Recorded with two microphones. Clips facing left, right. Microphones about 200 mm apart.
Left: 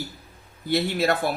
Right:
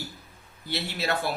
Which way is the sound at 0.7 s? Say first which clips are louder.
Left 8 dB; 50° left (ahead or behind).